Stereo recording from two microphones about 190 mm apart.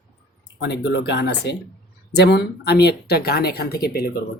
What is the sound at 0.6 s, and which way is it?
Speech, 65° left (ahead or behind).